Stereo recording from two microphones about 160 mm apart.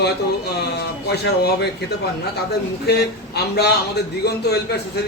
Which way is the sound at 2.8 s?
90° left.